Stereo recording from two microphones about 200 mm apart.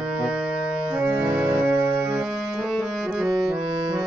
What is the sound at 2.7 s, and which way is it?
Music, centre (ahead or behind).